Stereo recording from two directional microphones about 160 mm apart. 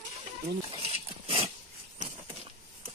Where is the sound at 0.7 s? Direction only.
35° right (ahead or behind).